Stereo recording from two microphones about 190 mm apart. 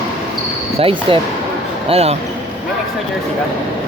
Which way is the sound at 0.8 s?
30° right (ahead or behind).